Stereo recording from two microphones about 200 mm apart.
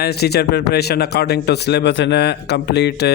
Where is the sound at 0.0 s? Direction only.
55° left (ahead or behind).